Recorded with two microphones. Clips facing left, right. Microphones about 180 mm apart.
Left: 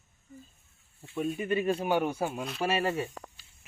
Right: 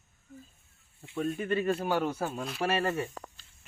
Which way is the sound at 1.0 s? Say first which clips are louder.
Even; 5° left (ahead or behind).